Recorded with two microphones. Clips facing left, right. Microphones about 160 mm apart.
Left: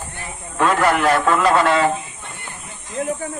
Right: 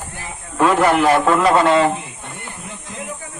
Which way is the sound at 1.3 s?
25° right (ahead or behind).